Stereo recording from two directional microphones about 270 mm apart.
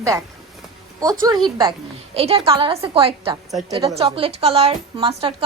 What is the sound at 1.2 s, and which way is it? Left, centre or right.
A woman's voice, centre.